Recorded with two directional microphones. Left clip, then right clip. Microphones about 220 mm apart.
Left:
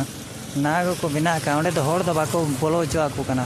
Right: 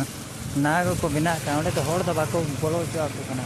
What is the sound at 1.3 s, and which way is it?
Speech, 30° left (ahead or behind).